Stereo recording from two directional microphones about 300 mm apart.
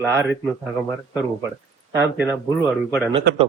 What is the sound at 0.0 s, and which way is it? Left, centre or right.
Speech, centre.